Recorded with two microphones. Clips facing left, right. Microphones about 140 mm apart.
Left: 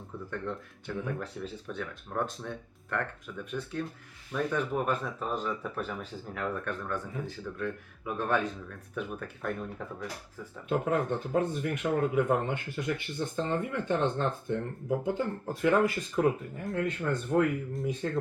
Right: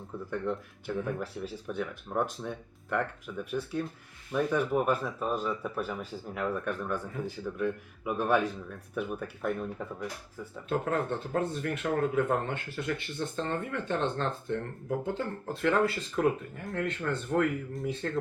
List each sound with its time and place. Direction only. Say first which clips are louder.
0.3 s speech: right 4 dB; 10° right (ahead or behind)
10.7 s speech: left 2 dB; 10° left (ahead or behind)